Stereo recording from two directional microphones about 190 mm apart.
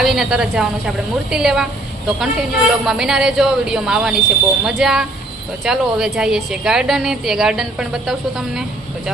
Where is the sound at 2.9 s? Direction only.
5° right (ahead or behind).